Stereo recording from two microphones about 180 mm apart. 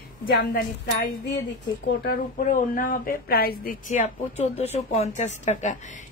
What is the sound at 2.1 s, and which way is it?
A woman's voice, 50° left (ahead or behind).